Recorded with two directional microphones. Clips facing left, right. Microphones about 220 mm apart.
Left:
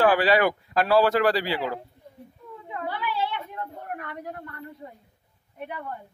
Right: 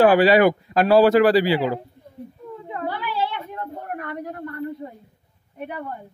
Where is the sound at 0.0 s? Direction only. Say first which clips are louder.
Right 6 dB; 15° right (ahead or behind).